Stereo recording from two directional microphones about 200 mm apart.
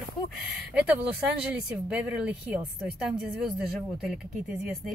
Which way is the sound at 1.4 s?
5° right (ahead or behind).